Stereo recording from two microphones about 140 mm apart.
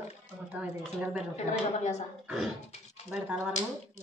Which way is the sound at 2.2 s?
5° right (ahead or behind).